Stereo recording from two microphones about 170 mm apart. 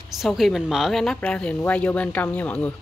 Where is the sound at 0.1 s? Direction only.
Centre (ahead or behind).